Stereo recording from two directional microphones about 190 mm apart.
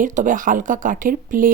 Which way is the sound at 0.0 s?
45° right (ahead or behind).